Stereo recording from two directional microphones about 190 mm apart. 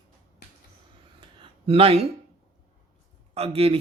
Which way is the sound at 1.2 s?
30° right (ahead or behind).